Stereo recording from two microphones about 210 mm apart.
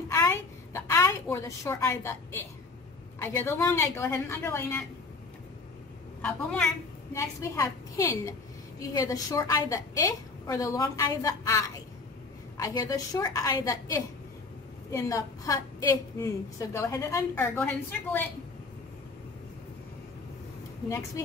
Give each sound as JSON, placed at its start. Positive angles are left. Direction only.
{"t": 0.1, "sound": "a woman's voice", "side_deg": 10}
{"t": 6.2, "sound": "a woman's voice", "side_deg": 5}